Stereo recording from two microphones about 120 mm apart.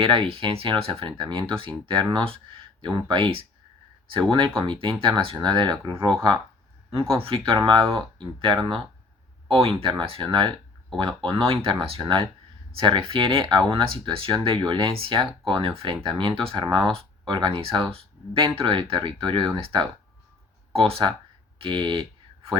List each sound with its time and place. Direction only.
0.0 s speech: 45° right (ahead or behind)
5.7 s speech: 25° right (ahead or behind)
7.1 s speech: 50° right (ahead or behind)